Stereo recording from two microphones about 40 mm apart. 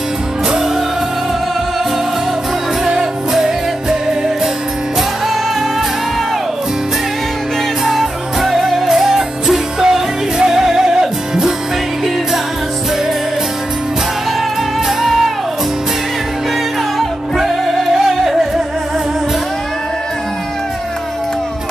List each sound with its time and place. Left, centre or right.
2.8 s music: centre
7.8 s music: centre
14.9 s music: centre
17.4 s music: centre